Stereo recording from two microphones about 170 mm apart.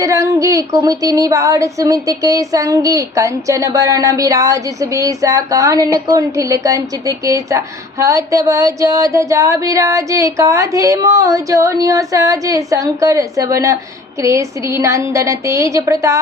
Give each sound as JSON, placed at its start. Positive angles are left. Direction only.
{"t": 0.0, "sound": "a woman's voice", "side_deg": -20}